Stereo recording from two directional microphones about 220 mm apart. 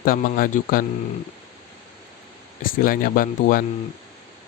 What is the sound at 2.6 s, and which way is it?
Speech, 40° left (ahead or behind).